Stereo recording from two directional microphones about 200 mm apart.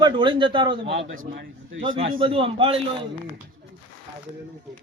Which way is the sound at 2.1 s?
25° right (ahead or behind).